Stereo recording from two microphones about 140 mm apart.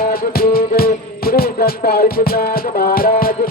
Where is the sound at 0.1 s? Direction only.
90° left.